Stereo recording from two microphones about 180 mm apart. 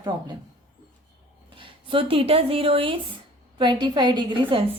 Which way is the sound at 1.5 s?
30° right (ahead or behind).